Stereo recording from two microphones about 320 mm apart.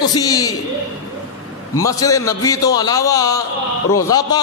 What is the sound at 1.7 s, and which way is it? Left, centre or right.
A man's voice, centre.